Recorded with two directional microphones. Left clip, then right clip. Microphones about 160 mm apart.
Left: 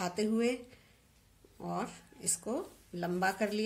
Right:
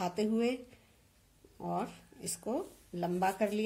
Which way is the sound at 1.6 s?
15° right (ahead or behind).